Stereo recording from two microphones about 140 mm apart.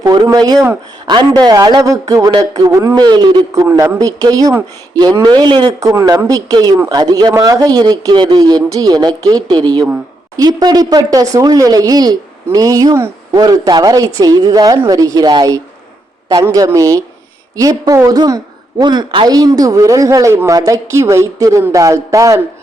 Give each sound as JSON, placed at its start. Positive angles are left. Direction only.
{"t": 0.0, "sound": "a man's voice", "side_deg": -30}